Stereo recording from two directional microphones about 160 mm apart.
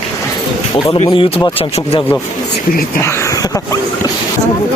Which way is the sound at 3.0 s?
15° left (ahead or behind).